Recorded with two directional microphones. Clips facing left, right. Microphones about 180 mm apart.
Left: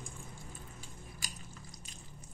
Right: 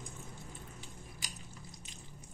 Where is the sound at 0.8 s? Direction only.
20° right (ahead or behind).